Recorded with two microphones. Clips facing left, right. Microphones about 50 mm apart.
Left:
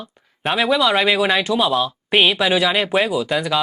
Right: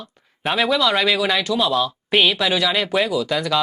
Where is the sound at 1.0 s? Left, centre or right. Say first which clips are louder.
Left 2 dB; left.